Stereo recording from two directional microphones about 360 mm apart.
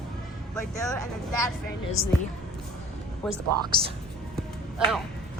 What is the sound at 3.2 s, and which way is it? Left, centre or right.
Speech, centre.